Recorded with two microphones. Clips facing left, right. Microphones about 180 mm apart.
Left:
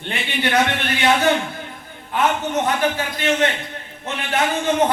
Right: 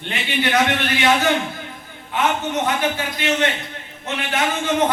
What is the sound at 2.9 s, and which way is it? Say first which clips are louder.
Speech: left 1 dB; 40° left (ahead or behind).